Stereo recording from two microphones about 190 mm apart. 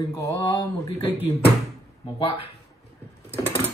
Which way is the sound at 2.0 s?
25° left (ahead or behind).